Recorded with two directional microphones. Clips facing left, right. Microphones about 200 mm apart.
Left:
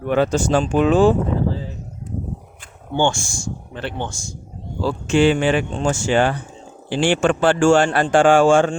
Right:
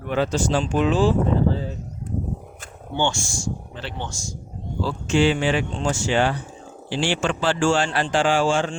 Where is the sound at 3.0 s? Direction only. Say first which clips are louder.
Left 4 dB; 50° left (ahead or behind).